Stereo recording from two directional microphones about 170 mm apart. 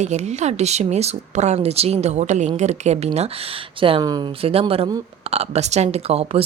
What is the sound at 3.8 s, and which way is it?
Speech, 30° right (ahead or behind).